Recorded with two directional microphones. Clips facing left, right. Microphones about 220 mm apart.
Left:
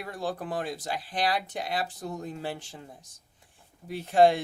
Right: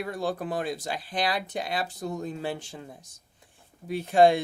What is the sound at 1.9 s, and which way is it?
Speech, 20° right (ahead or behind).